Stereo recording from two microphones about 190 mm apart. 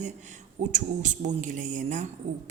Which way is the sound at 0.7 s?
40° right (ahead or behind).